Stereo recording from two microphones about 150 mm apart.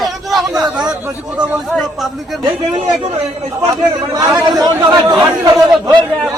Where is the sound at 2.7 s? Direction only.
45° right (ahead or behind).